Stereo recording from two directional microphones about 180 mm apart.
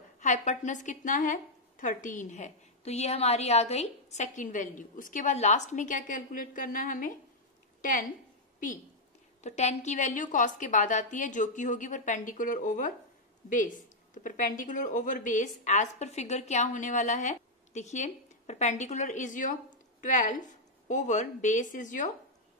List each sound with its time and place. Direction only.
0.2 s a woman's voice: 40° left (ahead or behind)
9.4 s a woman's voice: 40° left (ahead or behind)
14.1 s a woman's voice: 45° left (ahead or behind)